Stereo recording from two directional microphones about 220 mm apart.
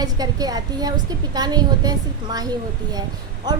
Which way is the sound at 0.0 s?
15° right (ahead or behind).